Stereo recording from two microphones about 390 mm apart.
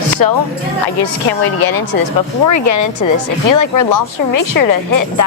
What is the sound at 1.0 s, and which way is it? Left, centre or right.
Speech, left.